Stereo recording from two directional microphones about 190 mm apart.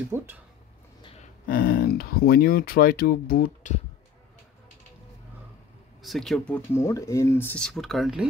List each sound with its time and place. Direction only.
0.1 s speech: 15° right (ahead or behind)
1.5 s speech: 50° left (ahead or behind)
6.0 s speech: centre (ahead or behind)